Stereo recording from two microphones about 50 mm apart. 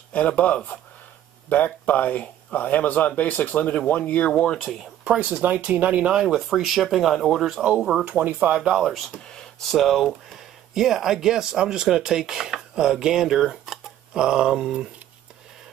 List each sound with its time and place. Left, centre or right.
0.3 s speech: left
1.5 s speech: left
4.3 s speech: centre
5.0 s speech: centre
5.3 s speech: right
6.2 s speech: centre
8.0 s speech: right
8.5 s speech: centre
9.7 s speech: centre